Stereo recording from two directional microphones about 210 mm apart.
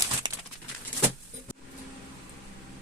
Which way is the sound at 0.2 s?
20° right (ahead or behind).